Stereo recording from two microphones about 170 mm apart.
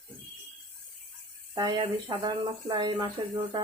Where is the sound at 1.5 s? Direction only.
25° right (ahead or behind).